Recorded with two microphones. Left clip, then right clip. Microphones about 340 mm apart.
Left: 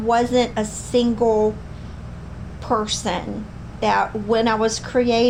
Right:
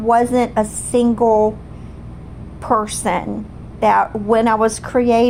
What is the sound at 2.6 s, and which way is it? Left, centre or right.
A woman's voice, right.